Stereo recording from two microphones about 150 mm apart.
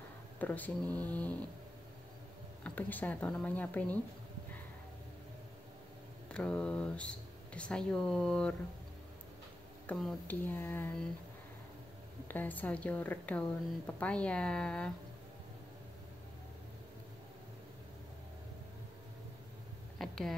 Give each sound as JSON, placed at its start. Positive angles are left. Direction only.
{"t": 0.4, "sound": "a woman's voice", "side_deg": 10}
{"t": 2.6, "sound": "a woman's voice", "side_deg": 10}
{"t": 6.3, "sound": "a woman's voice", "side_deg": 5}
{"t": 9.8, "sound": "a woman's voice", "side_deg": 5}
{"t": 12.3, "sound": "a woman's voice", "side_deg": 10}
{"t": 20.0, "sound": "a sound", "side_deg": 0}